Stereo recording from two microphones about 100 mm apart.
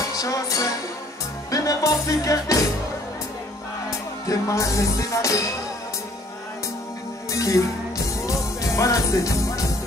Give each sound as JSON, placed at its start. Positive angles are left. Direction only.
{"t": 0.1, "sound": "music", "side_deg": 35}
{"t": 4.3, "sound": "music", "side_deg": 30}
{"t": 7.2, "sound": "speech", "side_deg": 35}
{"t": 8.3, "sound": "music", "side_deg": 30}